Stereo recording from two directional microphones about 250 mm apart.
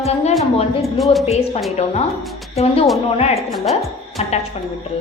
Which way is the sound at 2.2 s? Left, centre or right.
Centre.